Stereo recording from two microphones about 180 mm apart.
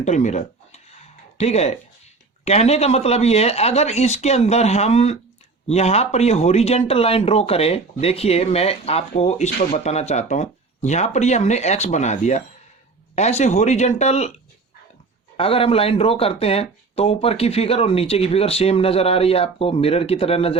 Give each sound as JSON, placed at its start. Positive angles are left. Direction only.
{"t": 0.0, "sound": "speech", "side_deg": 40}
{"t": 15.4, "sound": "speech", "side_deg": 30}